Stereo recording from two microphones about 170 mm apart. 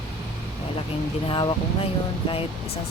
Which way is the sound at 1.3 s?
30° left (ahead or behind).